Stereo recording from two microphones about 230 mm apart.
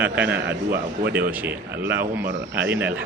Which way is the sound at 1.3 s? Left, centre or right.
Centre.